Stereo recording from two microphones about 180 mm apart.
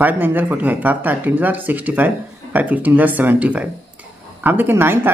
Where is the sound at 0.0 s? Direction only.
10° right (ahead or behind).